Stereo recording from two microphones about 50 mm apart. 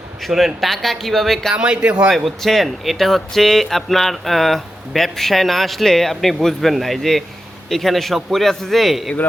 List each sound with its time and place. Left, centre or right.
0.2 s speech: centre
1.5 s speech: right
2.0 s speech: centre